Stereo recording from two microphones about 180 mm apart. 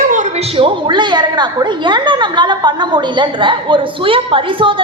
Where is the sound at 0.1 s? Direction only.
45° right (ahead or behind).